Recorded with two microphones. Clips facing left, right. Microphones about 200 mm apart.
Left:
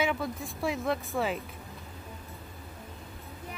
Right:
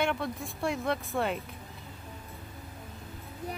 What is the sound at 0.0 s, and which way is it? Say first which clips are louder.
Speech: even; centre (ahead or behind).